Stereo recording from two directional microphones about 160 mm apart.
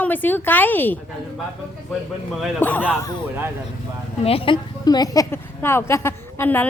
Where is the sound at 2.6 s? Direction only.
10° left (ahead or behind).